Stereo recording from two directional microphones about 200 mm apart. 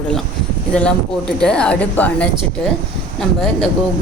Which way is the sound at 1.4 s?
5° left (ahead or behind).